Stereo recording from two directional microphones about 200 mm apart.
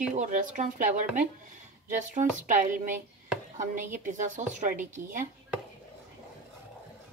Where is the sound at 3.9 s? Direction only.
40° right (ahead or behind).